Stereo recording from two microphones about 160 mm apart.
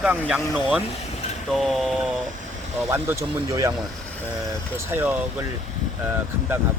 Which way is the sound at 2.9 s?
15° right (ahead or behind).